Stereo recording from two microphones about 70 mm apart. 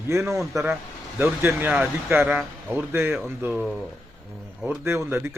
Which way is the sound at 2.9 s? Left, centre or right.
Right.